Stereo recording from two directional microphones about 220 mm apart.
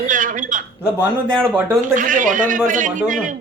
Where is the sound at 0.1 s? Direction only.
35° right (ahead or behind).